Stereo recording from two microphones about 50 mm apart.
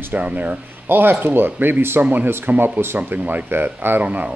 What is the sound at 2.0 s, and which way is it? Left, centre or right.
Speech, right.